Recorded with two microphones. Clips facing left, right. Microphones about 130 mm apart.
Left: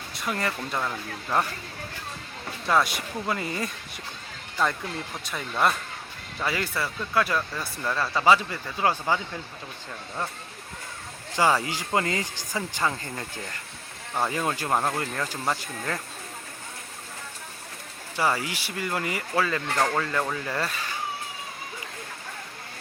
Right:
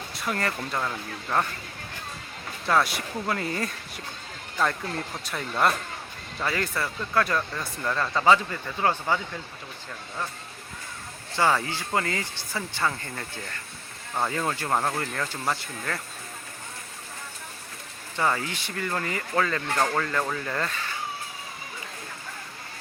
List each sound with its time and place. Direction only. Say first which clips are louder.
0.3 s speech: even; 5° left (ahead or behind)
2.6 s speech: even; centre (ahead or behind)
5.1 s speech: right 1 dB; centre (ahead or behind)
11.3 s speech: left 1 dB; 15° left (ahead or behind)
18.2 s speech: even; 10° left (ahead or behind)